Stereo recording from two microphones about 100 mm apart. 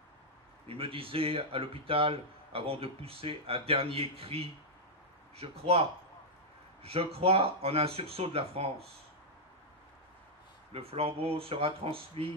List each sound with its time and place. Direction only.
0.7 s speech: 65° right (ahead or behind)
5.4 s speech: 85° right
10.7 s speech: 85° right